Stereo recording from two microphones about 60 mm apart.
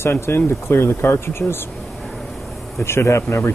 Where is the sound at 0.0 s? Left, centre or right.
Left.